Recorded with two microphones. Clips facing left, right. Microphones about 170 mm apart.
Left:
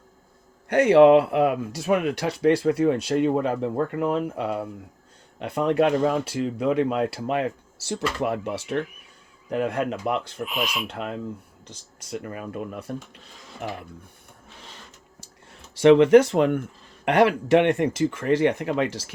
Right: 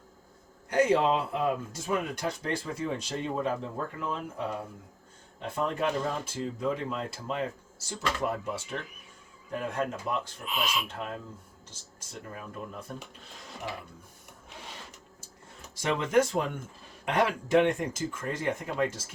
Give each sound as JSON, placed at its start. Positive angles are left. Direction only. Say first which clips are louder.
{"t": 0.7, "sound": "speech", "louder": "left 10 dB", "side_deg": 70}
{"t": 15.7, "sound": "speech", "louder": "left 12 dB", "side_deg": 70}